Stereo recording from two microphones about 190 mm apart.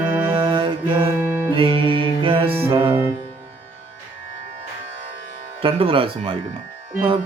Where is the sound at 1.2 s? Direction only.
10° right (ahead or behind).